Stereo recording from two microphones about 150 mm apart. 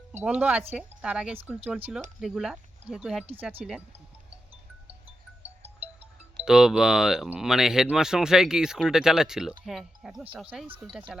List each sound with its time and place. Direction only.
0.1 s speech: 10° right (ahead or behind)
5.4 s music: 45° right (ahead or behind)
6.3 s speech: 5° right (ahead or behind)